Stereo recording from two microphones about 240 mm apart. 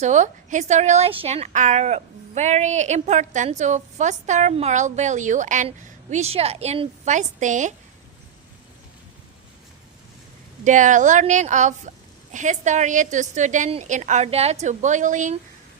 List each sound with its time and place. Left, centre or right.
0.0 s speech: right
10.6 s a woman's voice: right